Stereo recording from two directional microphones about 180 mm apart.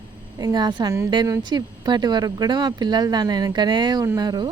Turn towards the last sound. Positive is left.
turn(degrees=-20)  # may be behind; listen again after turning